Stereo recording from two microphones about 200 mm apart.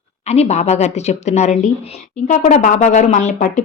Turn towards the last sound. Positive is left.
turn(degrees=35)  # may be behind; listen again after turning